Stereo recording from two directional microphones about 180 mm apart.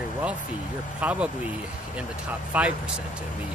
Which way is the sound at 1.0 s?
10° right (ahead or behind).